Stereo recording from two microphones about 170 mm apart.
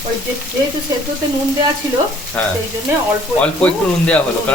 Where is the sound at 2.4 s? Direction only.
10° left (ahead or behind).